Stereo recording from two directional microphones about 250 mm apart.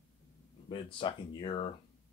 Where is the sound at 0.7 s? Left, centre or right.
Centre.